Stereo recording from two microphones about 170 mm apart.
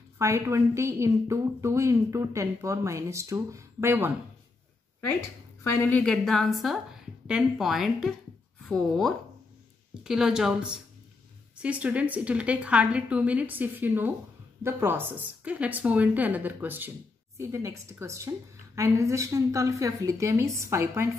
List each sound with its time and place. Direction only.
0.2 s a woman's voice: 15° right (ahead or behind)
5.6 s a woman's voice: 15° left (ahead or behind); by 21.1 s 15° right (ahead or behind)